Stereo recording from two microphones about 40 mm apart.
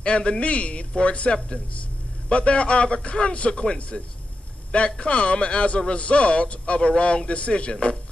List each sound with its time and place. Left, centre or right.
0.0 s a man's voice: left
5.0 s a man's voice: left